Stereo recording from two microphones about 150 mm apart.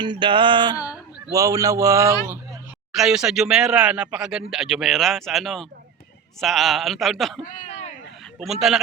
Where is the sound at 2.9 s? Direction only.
5° right (ahead or behind).